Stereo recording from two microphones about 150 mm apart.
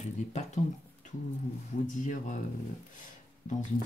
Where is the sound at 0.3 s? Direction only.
50° left (ahead or behind).